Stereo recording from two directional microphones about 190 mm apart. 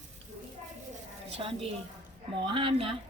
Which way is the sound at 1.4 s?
25° right (ahead or behind).